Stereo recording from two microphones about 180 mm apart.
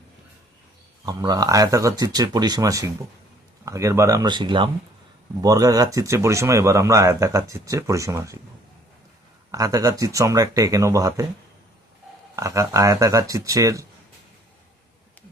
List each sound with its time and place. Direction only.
1.0 s speech: 20° right (ahead or behind)
9.5 s speech: 20° right (ahead or behind)
12.4 s speech: 15° right (ahead or behind)